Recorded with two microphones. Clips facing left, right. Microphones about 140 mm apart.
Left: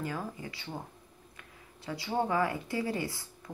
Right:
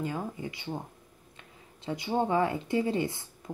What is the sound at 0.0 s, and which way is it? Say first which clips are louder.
Speech: right 3 dB; 20° right (ahead or behind).